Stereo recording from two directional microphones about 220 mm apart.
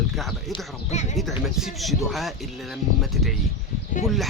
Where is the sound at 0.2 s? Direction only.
Centre (ahead or behind).